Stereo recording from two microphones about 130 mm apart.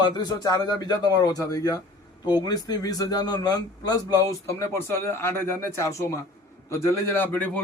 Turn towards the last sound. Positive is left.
turn(degrees=15)  # may be behind; listen again after turning